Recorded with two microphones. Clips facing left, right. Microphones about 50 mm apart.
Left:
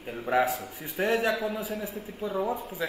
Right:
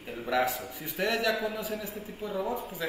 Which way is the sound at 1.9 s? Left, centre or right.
Left.